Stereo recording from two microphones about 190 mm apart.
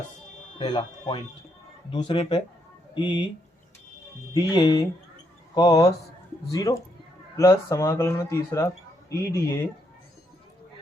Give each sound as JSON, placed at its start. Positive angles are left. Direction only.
{"t": 0.6, "sound": "speech", "side_deg": 25}
{"t": 4.4, "sound": "speech", "side_deg": 20}